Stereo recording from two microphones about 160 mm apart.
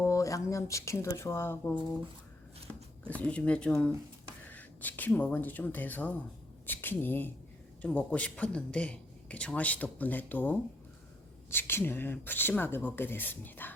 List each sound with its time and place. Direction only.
0.0 s speech: 20° left (ahead or behind)
3.0 s speech: 10° left (ahead or behind)